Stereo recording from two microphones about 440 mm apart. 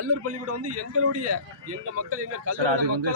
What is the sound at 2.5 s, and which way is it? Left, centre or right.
Speech, right.